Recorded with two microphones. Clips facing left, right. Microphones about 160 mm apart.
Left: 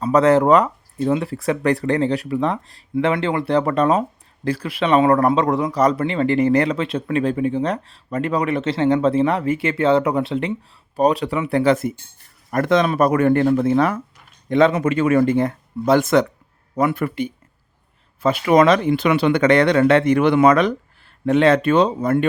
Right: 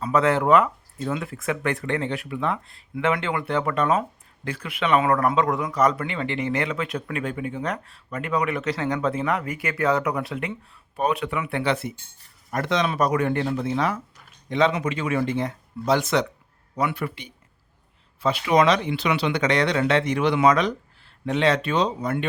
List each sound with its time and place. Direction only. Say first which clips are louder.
0.0 s a man's voice: left 6 dB; 40° left (ahead or behind)